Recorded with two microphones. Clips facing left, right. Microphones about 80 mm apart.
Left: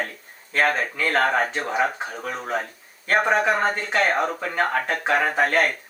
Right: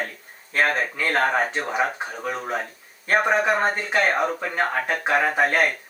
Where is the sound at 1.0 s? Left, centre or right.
Centre.